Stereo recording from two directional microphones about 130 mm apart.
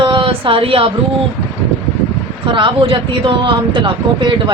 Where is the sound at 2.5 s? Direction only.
40° right (ahead or behind).